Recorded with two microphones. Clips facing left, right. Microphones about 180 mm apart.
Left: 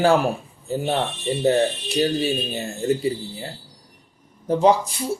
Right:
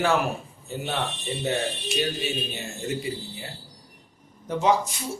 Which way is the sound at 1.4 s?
35° left (ahead or behind).